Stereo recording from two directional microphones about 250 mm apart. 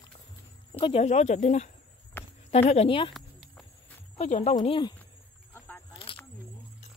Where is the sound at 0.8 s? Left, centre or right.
Left.